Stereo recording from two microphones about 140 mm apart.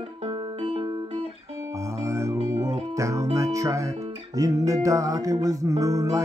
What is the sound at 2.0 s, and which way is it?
Music, 20° right (ahead or behind).